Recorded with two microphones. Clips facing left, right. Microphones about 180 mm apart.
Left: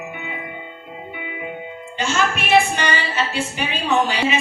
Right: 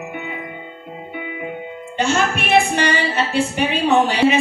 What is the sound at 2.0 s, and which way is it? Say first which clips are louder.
Music: right 3 dB; 60° right (ahead or behind).